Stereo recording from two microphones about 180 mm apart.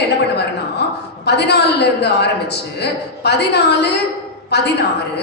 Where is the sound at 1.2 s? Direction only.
70° left (ahead or behind).